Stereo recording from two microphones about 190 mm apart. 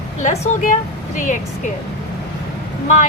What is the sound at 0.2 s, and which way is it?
A woman's voice, 40° left (ahead or behind).